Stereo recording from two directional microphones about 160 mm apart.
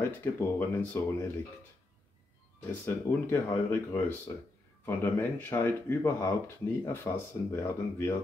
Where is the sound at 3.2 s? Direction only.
20° left (ahead or behind).